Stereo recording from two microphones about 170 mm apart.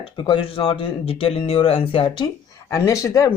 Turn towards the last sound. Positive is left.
turn(degrees=20)  # may be behind; listen again after turning